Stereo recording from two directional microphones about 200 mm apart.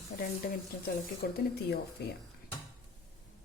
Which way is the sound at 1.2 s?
55° left (ahead or behind).